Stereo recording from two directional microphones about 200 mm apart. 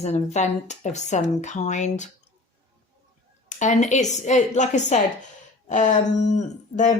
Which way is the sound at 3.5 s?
35° left (ahead or behind).